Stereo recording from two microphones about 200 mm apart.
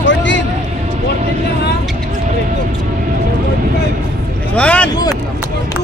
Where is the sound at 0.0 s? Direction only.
65° left (ahead or behind).